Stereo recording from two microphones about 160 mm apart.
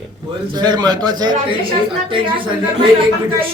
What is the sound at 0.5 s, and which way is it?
A man's voice, 25° right (ahead or behind).